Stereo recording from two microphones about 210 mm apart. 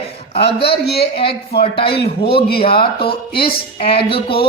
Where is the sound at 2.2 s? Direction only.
50° left (ahead or behind).